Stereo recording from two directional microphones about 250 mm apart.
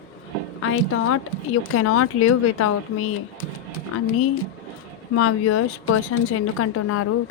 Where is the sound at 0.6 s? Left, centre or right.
Left.